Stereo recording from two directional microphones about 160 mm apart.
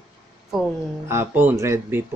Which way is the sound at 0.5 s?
5° right (ahead or behind).